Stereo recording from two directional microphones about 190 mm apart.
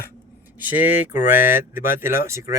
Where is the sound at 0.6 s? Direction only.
10° right (ahead or behind).